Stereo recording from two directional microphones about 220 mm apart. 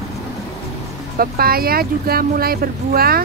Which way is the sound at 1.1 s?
40° right (ahead or behind).